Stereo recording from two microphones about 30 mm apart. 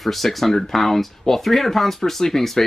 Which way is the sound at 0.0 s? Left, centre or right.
Centre.